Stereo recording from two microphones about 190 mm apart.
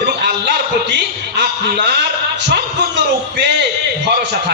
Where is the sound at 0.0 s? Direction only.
60° right (ahead or behind).